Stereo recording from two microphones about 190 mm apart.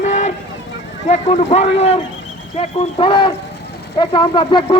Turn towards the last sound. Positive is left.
turn(degrees=25)  # may be behind; listen again after turning